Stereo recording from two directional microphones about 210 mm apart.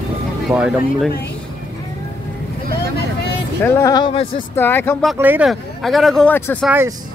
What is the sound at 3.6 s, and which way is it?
Speech, 15° left (ahead or behind).